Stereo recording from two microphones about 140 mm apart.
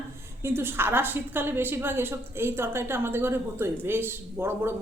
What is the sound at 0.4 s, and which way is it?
A woman's voice, 15° right (ahead or behind).